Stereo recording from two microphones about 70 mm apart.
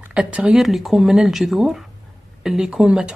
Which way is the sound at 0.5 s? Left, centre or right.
Centre.